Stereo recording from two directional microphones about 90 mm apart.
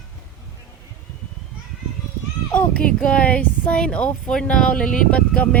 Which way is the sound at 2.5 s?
10° left (ahead or behind).